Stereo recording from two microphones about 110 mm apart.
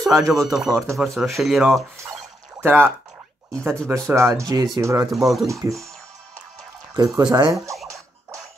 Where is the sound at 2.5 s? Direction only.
20° right (ahead or behind).